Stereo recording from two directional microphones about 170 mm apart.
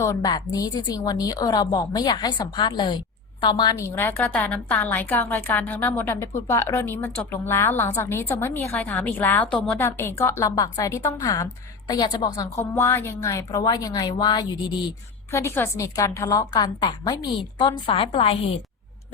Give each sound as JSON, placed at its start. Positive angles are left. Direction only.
{"t": 0.0, "sound": "a woman's voice", "side_deg": 20}
{"t": 15.3, "sound": "a woman's voice", "side_deg": 15}